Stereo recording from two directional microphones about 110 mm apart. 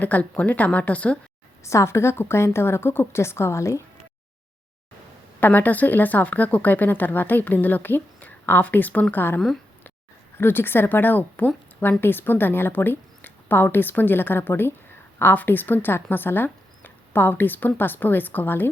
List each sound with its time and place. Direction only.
0.0 s speech: 15° left (ahead or behind)
1.6 s a woman's voice: 25° left (ahead or behind)
5.4 s a woman's voice: 15° left (ahead or behind)